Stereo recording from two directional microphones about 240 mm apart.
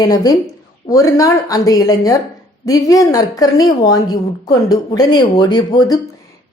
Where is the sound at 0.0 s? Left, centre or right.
Centre.